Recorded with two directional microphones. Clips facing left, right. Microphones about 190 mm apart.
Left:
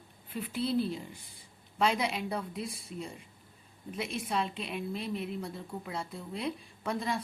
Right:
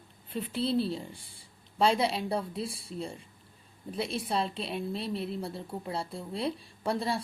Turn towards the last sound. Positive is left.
turn(degrees=-35)  # may be behind; listen again after turning